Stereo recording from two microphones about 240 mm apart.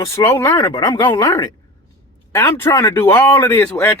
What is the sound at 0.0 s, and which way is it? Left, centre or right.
Speech, centre.